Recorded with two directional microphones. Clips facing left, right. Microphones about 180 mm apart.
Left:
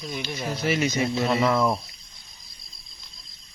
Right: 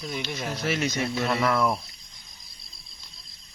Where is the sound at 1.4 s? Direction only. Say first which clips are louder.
Even; 20° left (ahead or behind).